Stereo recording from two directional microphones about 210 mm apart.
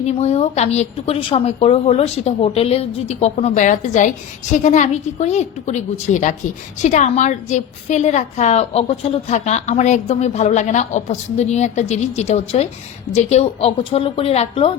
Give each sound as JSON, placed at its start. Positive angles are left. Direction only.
{"t": 0.0, "sound": "a woman's voice", "side_deg": 30}